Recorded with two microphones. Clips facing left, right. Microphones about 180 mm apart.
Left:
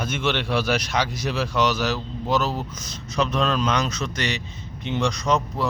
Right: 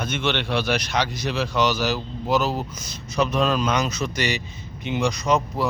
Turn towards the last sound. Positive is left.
turn(degrees=-5)  # may be behind; listen again after turning